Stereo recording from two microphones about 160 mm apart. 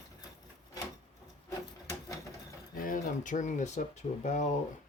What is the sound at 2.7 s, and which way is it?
Speech, 60° left (ahead or behind).